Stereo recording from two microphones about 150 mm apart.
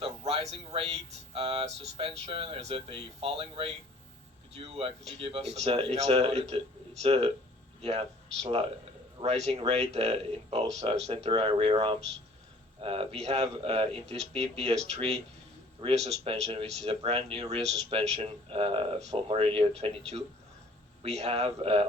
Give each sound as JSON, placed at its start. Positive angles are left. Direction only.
{"t": 0.0, "sound": "speech", "side_deg": -40}
{"t": 21.0, "sound": "speech", "side_deg": -40}